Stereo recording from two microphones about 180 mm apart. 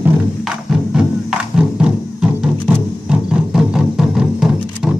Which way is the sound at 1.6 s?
5° right (ahead or behind).